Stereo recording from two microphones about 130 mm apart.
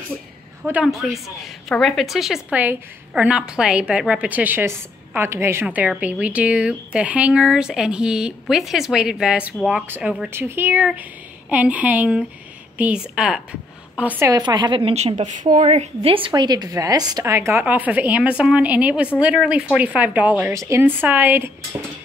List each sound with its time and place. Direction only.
0.8 s a woman's voice: centre (ahead or behind)
14.3 s a woman's voice: 35° right (ahead or behind); by 21.5 s 15° right (ahead or behind)